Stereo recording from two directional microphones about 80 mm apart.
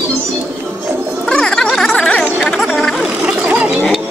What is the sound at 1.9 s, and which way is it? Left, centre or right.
Chatter, centre.